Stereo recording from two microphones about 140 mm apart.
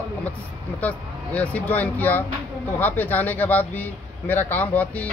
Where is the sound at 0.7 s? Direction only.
10° left (ahead or behind).